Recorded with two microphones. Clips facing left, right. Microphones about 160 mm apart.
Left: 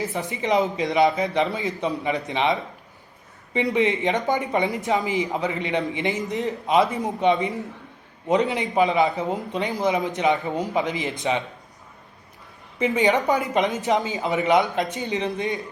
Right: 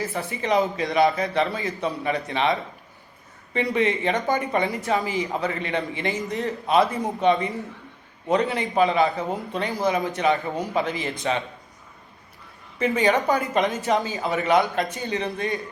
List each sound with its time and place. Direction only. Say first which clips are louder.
0.0 s a man's voice: left 1 dB; 20° left (ahead or behind)
12.8 s a man's voice: left 1 dB; 20° left (ahead or behind)